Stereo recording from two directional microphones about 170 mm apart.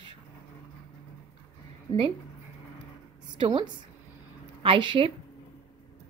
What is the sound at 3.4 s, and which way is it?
A woman's voice, 30° right (ahead or behind).